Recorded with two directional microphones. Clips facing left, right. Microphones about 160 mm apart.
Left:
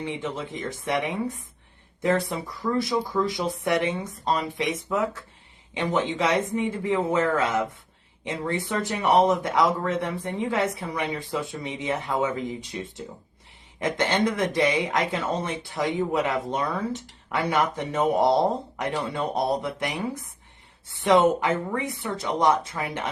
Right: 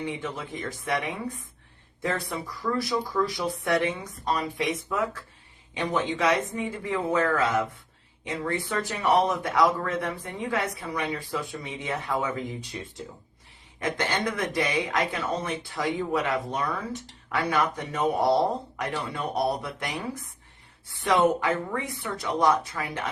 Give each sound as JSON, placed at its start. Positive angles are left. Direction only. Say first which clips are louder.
{"t": 0.0, "sound": "speech", "louder": "left 2 dB", "side_deg": 25}
{"t": 5.8, "sound": "speech", "louder": "left 1 dB", "side_deg": 25}